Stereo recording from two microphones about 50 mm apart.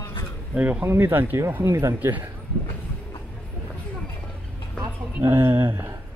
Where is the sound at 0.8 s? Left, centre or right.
Right.